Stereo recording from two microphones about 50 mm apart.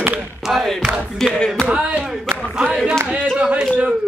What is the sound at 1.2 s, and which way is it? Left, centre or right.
Music, centre.